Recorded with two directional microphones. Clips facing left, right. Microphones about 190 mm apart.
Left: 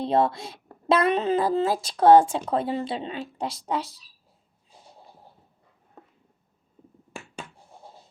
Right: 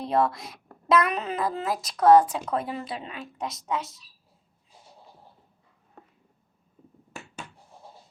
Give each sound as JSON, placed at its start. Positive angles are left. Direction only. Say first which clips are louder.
{"t": 0.0, "sound": "speech", "louder": "left 2 dB", "side_deg": 25}